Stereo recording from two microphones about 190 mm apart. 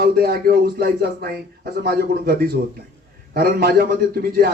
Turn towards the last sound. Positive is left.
turn(degrees=-55)  # may be behind; listen again after turning